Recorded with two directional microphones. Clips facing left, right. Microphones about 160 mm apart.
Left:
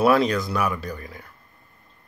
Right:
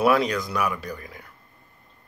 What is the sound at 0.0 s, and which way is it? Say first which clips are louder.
Speech: left 2 dB; 15° right (ahead or behind).